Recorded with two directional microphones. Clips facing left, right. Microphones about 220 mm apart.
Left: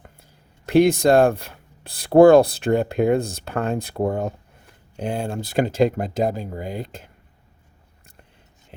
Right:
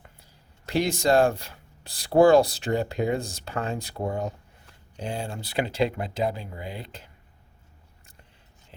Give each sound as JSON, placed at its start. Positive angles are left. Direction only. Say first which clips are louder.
{"t": 0.6, "sound": "speech", "louder": "left 9 dB", "side_deg": 55}